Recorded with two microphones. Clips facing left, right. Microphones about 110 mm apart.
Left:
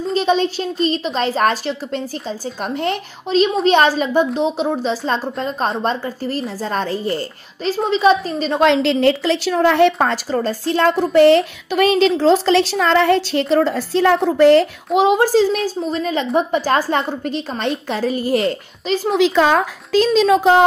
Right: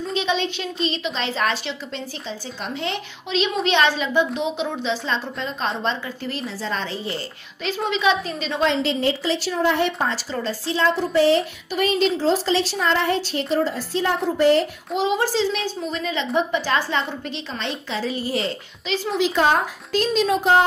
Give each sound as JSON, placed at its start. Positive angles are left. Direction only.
{"t": 0.1, "sound": "a woman's voice", "side_deg": 40}
{"t": 8.5, "sound": "a woman's voice", "side_deg": 70}
{"t": 10.1, "sound": "a woman's voice", "side_deg": 50}
{"t": 15.0, "sound": "a woman's voice", "side_deg": 50}
{"t": 20.1, "sound": "a woman's voice", "side_deg": 90}